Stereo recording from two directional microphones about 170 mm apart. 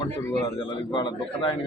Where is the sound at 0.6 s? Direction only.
25° left (ahead or behind).